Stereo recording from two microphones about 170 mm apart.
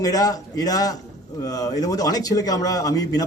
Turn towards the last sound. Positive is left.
turn(degrees=20)  # may be behind; listen again after turning